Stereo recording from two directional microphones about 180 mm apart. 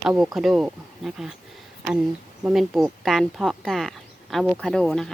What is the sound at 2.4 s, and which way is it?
Speech, centre (ahead or behind).